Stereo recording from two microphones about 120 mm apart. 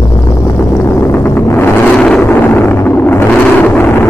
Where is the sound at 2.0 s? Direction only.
10° left (ahead or behind).